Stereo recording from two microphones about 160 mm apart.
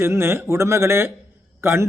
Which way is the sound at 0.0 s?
15° right (ahead or behind).